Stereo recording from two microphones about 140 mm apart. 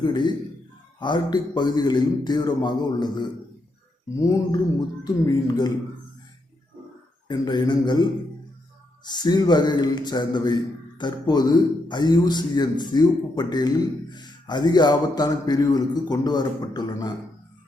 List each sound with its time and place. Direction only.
0.0 s a man's voice: 30° left (ahead or behind)
7.3 s speech: 30° left (ahead or behind)
9.0 s a man's voice: 30° left (ahead or behind)